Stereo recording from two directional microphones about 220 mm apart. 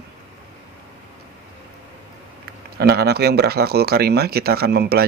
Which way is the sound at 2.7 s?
45° right (ahead or behind).